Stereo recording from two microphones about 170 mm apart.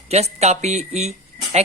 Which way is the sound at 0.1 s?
40° right (ahead or behind).